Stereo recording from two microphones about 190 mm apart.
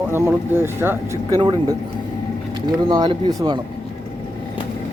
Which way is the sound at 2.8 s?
25° right (ahead or behind).